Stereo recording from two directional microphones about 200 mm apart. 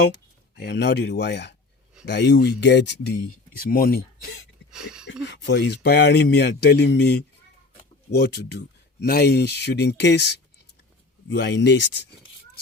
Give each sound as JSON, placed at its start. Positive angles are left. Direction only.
{"t": 0.5, "sound": "speech", "side_deg": 55}
{"t": 3.6, "sound": "speech", "side_deg": 45}
{"t": 4.7, "sound": "a sound", "side_deg": -5}
{"t": 5.2, "sound": "speech", "side_deg": 60}